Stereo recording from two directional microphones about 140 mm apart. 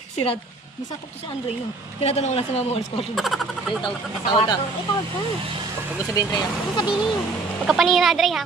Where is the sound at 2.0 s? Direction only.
50° left (ahead or behind).